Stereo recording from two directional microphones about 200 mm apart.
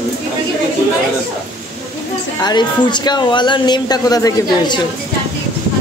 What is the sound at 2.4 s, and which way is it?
Speech, 20° left (ahead or behind).